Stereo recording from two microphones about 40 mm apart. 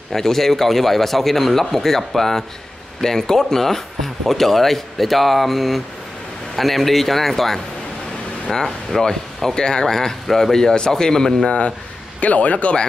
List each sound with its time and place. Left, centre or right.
0.1 s speech: centre
11.4 s speech: left